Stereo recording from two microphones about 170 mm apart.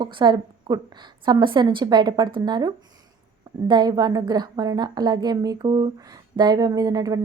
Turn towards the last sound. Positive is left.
turn(degrees=-20)  # may be behind; listen again after turning